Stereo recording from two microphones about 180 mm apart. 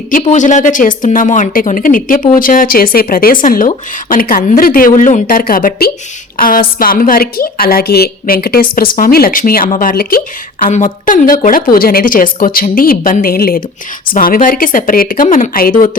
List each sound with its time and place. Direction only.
0.2 s a woman's voice: 45° left (ahead or behind)
10.6 s speech: 45° left (ahead or behind)